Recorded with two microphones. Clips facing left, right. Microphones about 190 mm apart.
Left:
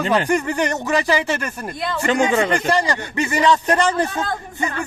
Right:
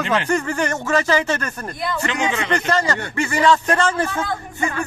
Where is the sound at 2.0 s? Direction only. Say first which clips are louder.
Left 8 dB; 45° left (ahead or behind).